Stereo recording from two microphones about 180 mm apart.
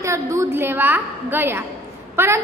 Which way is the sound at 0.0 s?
15° right (ahead or behind).